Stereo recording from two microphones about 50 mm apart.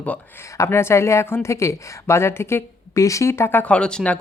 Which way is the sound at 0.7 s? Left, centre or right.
Left.